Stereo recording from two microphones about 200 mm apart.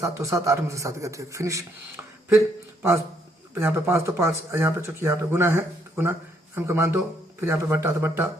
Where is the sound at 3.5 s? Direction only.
10° right (ahead or behind).